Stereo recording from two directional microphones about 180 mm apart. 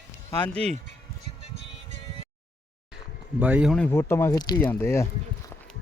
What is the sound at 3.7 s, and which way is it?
Speech, 10° left (ahead or behind).